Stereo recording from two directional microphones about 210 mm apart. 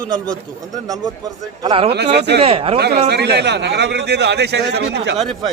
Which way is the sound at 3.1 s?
50° right (ahead or behind).